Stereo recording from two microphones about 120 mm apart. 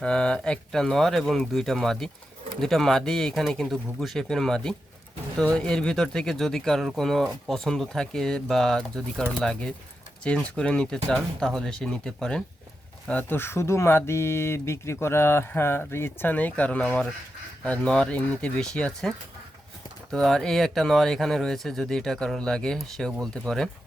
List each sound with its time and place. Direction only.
0.0 s speech: 5° left (ahead or behind)